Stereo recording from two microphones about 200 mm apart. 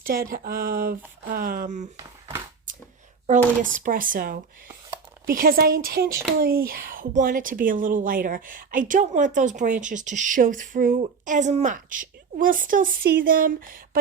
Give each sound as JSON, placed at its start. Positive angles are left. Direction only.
{"t": 0.0, "sound": "speech", "side_deg": -45}
{"t": 2.7, "sound": "a sound", "side_deg": -40}
{"t": 3.2, "sound": "speech", "side_deg": -40}